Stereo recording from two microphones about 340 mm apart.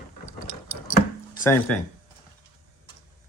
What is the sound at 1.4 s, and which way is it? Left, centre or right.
Speech, centre.